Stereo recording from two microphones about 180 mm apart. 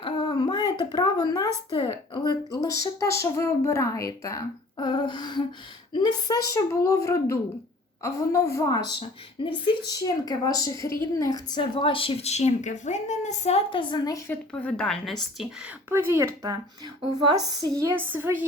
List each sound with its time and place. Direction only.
0.0 s a woman's voice: 25° left (ahead or behind)
14.5 s a woman's voice: 5° left (ahead or behind); by 18.4 s 10° right (ahead or behind)